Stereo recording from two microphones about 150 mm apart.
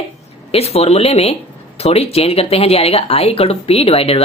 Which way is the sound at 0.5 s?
45° left (ahead or behind).